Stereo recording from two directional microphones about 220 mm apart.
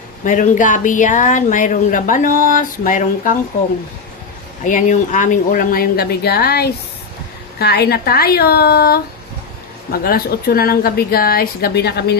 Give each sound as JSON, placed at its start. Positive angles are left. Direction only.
{"t": 0.3, "sound": "speech", "side_deg": 35}
{"t": 4.6, "sound": "speech", "side_deg": 35}